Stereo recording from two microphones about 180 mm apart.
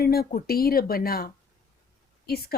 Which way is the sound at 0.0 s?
60° left (ahead or behind).